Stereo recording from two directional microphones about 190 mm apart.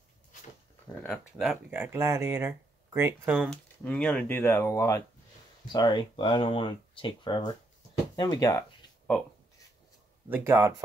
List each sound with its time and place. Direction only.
1.1 s speech: 5° right (ahead or behind)
3.3 s speech: 5° left (ahead or behind)
10.3 s speech: 15° right (ahead or behind)